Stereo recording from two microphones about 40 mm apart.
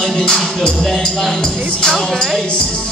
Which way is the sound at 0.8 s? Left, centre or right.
Centre.